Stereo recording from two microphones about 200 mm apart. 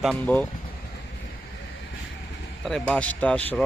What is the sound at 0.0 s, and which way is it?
Speech, 5° left (ahead or behind).